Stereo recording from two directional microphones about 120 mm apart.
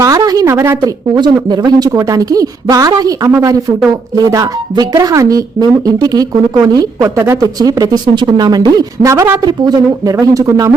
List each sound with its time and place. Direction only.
0.0 s speech: 30° right (ahead or behind)
1.1 s speech: 35° right (ahead or behind)